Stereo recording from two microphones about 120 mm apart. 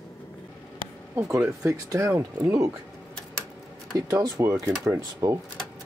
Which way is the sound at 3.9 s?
30° right (ahead or behind).